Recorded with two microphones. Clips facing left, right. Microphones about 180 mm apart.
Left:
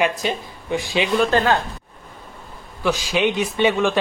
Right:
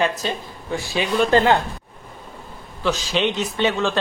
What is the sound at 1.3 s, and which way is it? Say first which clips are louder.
Speech: right 6 dB; 15° right (ahead or behind).